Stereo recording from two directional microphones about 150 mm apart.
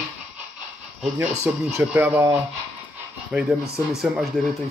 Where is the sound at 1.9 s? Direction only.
10° right (ahead or behind).